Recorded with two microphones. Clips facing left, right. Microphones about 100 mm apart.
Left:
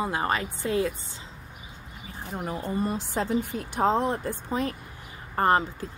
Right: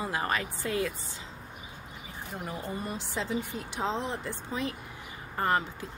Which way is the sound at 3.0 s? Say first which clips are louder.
Left 5 dB; 45° left (ahead or behind).